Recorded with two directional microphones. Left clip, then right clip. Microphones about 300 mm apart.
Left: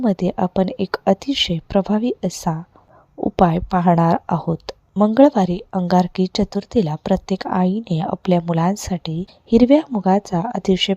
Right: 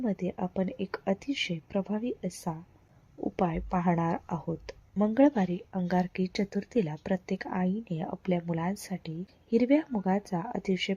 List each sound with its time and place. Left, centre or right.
0.0 s speech: left